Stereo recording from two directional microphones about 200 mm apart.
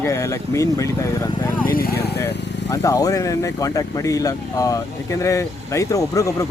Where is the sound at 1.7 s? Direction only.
50° left (ahead or behind).